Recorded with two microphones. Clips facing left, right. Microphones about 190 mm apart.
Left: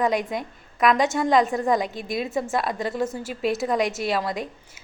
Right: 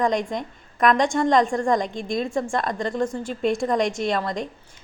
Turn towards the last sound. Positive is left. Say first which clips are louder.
# right 1 dB
turn(degrees=5)  # may be behind; listen again after turning